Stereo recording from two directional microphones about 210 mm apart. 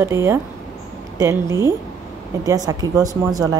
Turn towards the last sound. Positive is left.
turn(degrees=-15)  # may be behind; listen again after turning